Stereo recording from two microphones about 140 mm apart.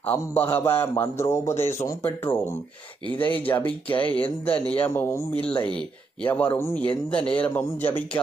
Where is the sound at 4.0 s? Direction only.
40° left (ahead or behind).